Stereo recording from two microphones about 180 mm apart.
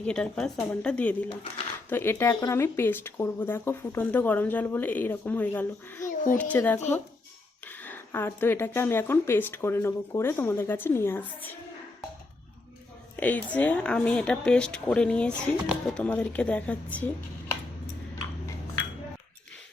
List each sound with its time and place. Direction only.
0.0 s speech: 5° left (ahead or behind)
6.1 s a sound: 50° left (ahead or behind)
6.4 s speech: 10° left (ahead or behind)
13.1 s speech: 10° left (ahead or behind)